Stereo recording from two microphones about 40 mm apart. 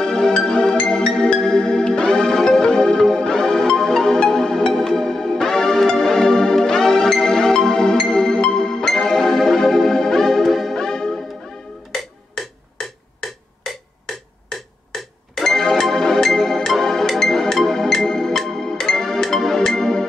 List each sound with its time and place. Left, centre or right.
0.0 s music: centre
10.8 s music: centre
14.9 s music: centre